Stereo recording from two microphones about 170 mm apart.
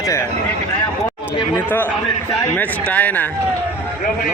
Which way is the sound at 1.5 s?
10° left (ahead or behind).